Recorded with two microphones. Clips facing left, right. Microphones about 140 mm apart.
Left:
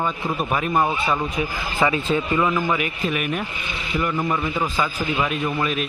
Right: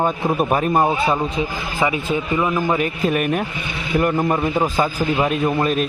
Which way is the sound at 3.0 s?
45° right (ahead or behind).